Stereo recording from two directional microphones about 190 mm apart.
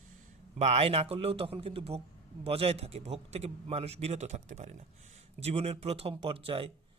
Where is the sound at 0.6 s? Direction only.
35° right (ahead or behind).